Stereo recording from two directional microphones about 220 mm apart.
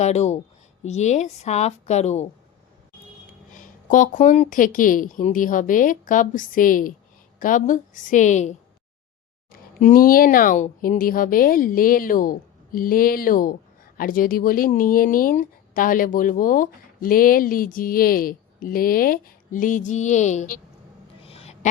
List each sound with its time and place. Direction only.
0.0 s speech: 30° left (ahead or behind)
3.5 s speech: 35° left (ahead or behind)
21.2 s a sound: 25° left (ahead or behind)